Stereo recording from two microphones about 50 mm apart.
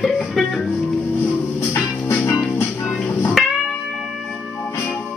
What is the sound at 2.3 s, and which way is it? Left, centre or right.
Music, left.